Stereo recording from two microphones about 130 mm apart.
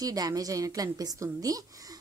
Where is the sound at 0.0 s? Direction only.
30° right (ahead or behind).